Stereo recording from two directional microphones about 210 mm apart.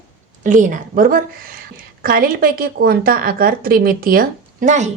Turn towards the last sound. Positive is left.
turn(degrees=-35)  # may be behind; listen again after turning